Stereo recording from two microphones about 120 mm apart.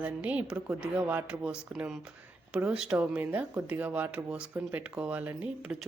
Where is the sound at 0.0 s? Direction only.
10° right (ahead or behind).